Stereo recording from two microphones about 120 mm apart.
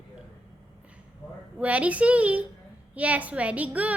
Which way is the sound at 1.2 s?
30° left (ahead or behind).